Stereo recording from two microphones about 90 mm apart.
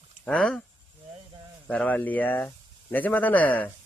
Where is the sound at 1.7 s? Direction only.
15° left (ahead or behind).